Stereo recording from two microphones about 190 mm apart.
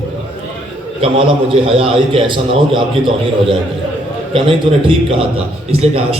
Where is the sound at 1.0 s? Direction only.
30° right (ahead or behind).